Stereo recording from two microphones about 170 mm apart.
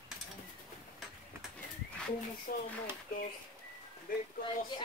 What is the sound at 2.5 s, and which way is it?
Speech, 55° left (ahead or behind).